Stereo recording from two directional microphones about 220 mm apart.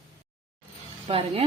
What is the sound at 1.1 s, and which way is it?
Speech, 25° right (ahead or behind).